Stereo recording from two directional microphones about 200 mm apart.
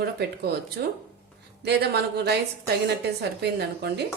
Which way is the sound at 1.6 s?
55° right (ahead or behind).